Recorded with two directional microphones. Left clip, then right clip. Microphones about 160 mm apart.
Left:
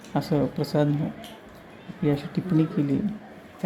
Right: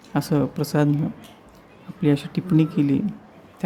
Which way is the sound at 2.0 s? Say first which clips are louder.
Right 4 dB; 20° right (ahead or behind).